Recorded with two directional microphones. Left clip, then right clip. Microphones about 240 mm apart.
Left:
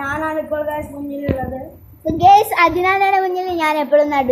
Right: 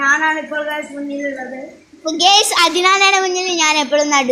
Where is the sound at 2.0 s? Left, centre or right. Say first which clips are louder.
Left 2 dB; centre.